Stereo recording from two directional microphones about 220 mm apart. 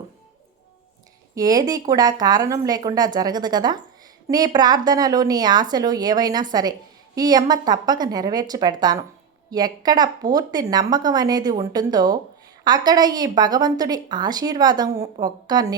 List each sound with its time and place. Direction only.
1.4 s a woman's voice: 15° right (ahead or behind)